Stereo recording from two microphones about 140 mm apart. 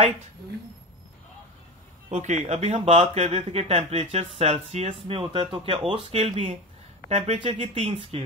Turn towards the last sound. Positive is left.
turn(degrees=-45)  # may be behind; listen again after turning